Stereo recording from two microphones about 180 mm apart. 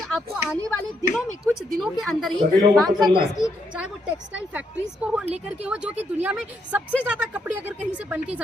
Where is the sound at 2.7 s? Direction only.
20° right (ahead or behind).